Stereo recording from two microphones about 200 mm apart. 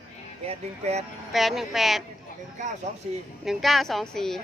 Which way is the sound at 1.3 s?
Centre (ahead or behind).